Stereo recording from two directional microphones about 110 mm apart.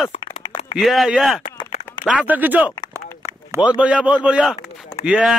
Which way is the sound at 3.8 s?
10° right (ahead or behind).